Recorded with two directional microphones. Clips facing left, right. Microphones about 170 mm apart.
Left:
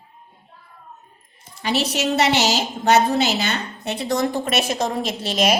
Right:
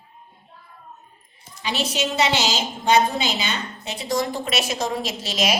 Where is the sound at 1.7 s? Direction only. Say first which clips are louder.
Left 4 dB; 65° left (ahead or behind).